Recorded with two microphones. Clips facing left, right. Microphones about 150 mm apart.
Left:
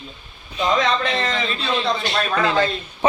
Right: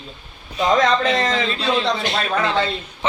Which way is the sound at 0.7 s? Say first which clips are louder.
Right 5 dB; 35° right (ahead or behind).